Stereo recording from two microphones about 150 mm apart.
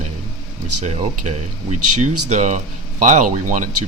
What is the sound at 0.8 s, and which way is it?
Speech, 50° right (ahead or behind).